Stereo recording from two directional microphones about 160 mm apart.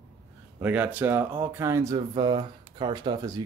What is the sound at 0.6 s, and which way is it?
Speech, 10° right (ahead or behind).